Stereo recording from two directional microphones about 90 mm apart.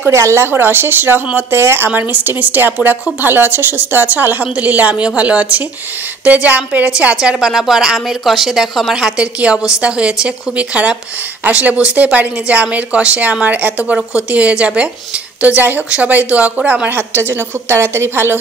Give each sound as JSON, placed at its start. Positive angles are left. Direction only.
{"t": 0.0, "sound": "a woman's voice", "side_deg": -30}